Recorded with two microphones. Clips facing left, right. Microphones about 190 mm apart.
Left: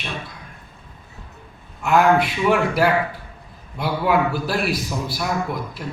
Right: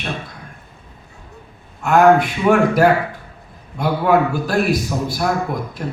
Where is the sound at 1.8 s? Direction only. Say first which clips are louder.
Right 4 dB; 45° right (ahead or behind).